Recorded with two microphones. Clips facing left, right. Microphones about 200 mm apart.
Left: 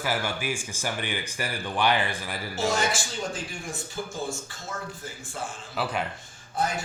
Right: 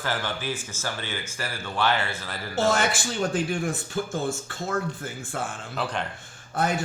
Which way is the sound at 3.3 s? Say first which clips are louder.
Right 9 dB; 60° right (ahead or behind).